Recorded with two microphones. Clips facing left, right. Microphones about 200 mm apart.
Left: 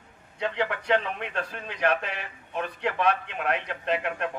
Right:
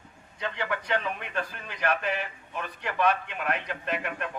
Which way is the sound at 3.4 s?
60° left (ahead or behind).